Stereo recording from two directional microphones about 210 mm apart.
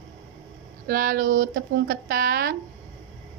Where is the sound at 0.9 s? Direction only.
40° right (ahead or behind).